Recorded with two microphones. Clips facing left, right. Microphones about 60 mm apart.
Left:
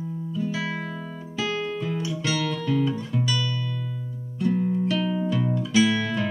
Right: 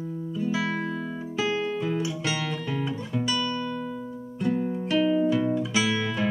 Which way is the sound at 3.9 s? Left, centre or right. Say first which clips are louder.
Right 2 dB; centre.